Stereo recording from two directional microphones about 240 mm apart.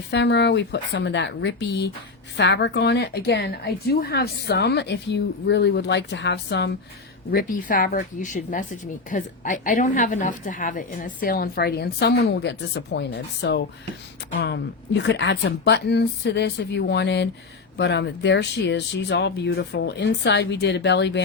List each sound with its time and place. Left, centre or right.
0.1 s a woman's voice: left